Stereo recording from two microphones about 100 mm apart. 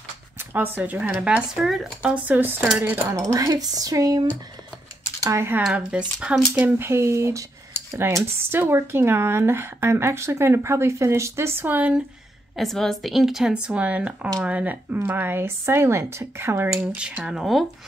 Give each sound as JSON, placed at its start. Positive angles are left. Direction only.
{"t": 0.4, "sound": "speech", "side_deg": -20}
{"t": 3.1, "sound": "speech", "side_deg": -35}
{"t": 5.7, "sound": "speech", "side_deg": -10}
{"t": 12.5, "sound": "a woman's voice", "side_deg": 5}
{"t": 16.7, "sound": "speech", "side_deg": -10}